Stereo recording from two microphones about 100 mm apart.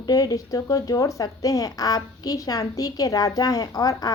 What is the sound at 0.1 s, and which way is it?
Speech, 35° left (ahead or behind).